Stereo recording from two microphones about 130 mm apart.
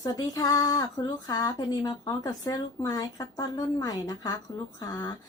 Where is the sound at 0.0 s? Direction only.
30° left (ahead or behind).